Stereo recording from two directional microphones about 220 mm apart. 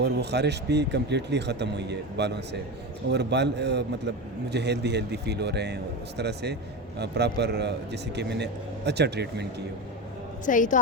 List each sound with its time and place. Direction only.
0.0 s a man's voice: 50° right (ahead or behind)
10.4 s a woman's voice: 35° left (ahead or behind)